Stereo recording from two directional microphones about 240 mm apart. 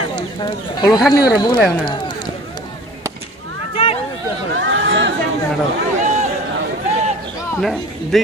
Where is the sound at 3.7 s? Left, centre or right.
Left.